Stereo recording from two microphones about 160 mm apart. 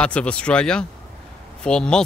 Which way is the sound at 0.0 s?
5° left (ahead or behind).